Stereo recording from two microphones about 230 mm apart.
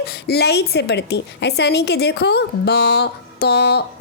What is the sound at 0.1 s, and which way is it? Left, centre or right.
A woman's voice, left.